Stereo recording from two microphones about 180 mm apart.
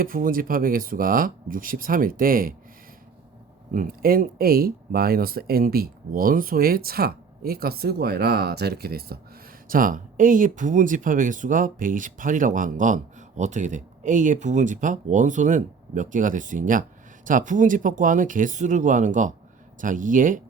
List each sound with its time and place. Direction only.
0.0 s speech: 50° right (ahead or behind)
3.8 s speech: 50° right (ahead or behind)